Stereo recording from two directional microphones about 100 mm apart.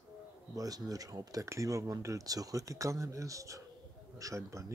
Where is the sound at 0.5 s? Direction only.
40° right (ahead or behind).